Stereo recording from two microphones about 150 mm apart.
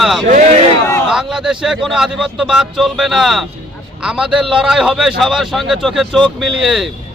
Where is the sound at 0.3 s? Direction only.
60° right (ahead or behind).